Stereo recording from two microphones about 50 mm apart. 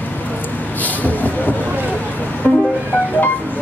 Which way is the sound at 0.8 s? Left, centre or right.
Left.